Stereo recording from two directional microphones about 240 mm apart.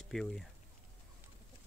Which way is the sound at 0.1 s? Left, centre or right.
Centre.